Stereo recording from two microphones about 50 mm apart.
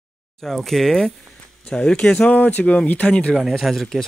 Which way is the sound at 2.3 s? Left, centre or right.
Left.